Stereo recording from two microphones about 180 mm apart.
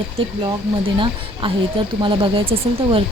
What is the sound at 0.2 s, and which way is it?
Speech, 30° right (ahead or behind).